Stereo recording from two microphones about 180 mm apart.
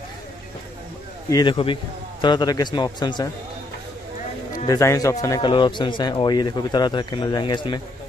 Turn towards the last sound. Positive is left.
turn(degrees=25)  # may be behind; listen again after turning